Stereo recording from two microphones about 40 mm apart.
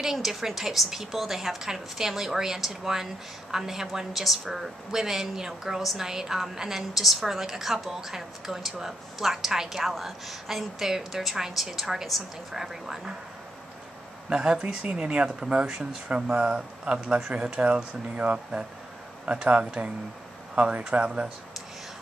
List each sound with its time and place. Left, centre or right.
0.0 s a woman's voice: centre
14.3 s speech: centre
15.6 s a woman's voice: centre
16.3 s speech: right
19.4 s speech: right